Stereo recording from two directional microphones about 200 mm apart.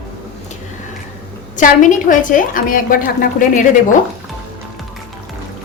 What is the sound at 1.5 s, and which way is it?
A woman's voice, 40° left (ahead or behind).